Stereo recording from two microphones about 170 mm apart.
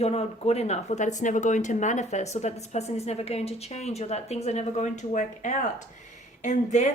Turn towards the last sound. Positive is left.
turn(degrees=45)  # may be behind; listen again after turning